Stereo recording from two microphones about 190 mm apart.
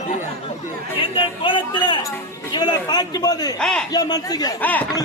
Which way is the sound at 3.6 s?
5° left (ahead or behind).